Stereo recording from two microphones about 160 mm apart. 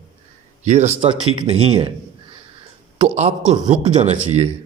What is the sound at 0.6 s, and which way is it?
Speech, 45° right (ahead or behind).